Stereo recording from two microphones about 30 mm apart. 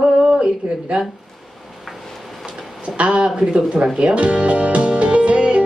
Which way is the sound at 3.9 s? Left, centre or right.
Right.